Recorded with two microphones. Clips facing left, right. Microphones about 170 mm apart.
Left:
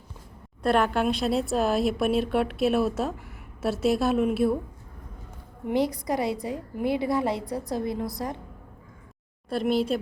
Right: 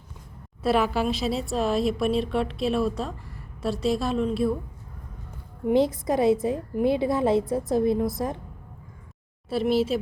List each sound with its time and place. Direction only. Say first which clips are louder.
0.6 s a woman's voice: even; 5° right (ahead or behind)
5.7 s a woman's voice: right 3 dB; 20° right (ahead or behind)
9.5 s a woman's voice: right 2 dB; 5° right (ahead or behind)